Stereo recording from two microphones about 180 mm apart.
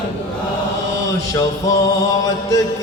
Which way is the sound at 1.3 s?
20° left (ahead or behind).